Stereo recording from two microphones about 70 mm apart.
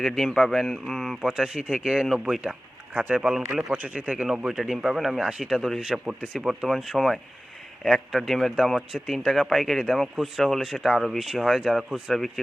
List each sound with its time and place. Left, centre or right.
0.0 s speech: centre
1.3 s speech: centre
2.9 s speech: right
3.2 s speech: centre
3.7 s speech: right
4.3 s speech: centre